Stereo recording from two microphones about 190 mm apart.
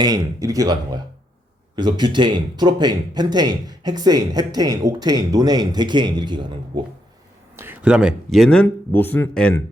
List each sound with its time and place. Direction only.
0.0 s speech: 20° right (ahead or behind)
7.5 s a man's voice: 10° right (ahead or behind); by 9.6 s 5° left (ahead or behind)